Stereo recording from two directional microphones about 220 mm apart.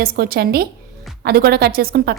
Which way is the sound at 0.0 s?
45° right (ahead or behind).